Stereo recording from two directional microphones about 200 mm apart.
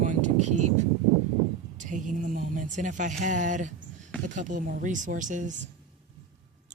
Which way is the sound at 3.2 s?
40° right (ahead or behind).